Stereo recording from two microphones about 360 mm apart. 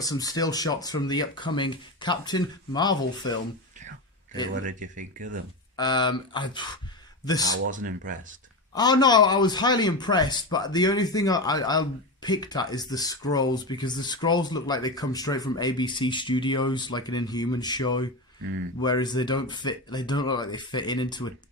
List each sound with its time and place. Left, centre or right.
0.0 s a man's voice: centre
4.6 s speech: right
5.7 s a man's voice: centre
7.4 s speech: right
8.7 s a man's voice: centre